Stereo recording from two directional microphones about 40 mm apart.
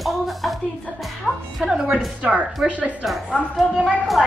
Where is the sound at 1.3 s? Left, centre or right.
Centre.